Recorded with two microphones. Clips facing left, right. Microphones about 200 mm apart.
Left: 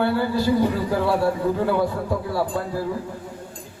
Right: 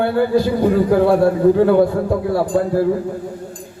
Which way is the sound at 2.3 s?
50° right (ahead or behind).